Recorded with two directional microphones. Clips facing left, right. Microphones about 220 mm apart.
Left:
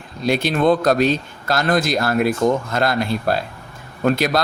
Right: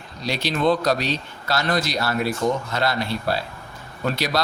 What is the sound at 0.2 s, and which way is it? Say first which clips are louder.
Speech: left 5 dB; 50° left (ahead or behind).